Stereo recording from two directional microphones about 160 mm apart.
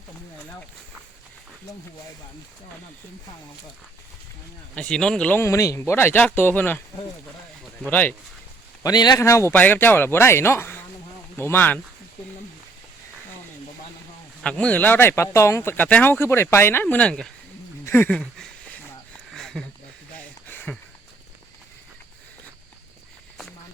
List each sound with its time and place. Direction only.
4.7 s speech: 5° left (ahead or behind)
7.9 s speech: 10° left (ahead or behind)
8.8 s speech: 25° left (ahead or behind)
14.4 s speech: 5° left (ahead or behind)
18.1 s a sound: 5° left (ahead or behind)